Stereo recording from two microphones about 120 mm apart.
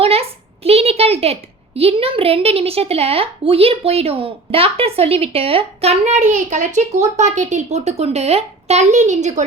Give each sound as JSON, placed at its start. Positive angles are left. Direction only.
{"t": 0.0, "sound": "a woman's voice", "side_deg": -55}